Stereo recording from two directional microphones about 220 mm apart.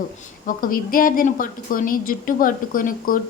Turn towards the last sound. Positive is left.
turn(degrees=40)  # may be behind; listen again after turning